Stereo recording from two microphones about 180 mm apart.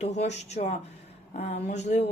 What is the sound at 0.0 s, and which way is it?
Speech, 40° left (ahead or behind).